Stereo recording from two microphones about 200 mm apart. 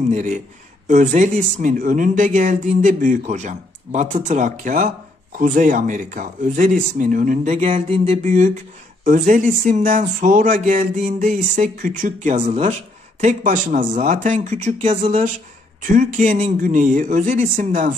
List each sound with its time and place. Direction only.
0.1 s speech: 35° right (ahead or behind)